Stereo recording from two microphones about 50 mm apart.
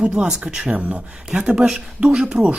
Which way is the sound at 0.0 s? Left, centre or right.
Right.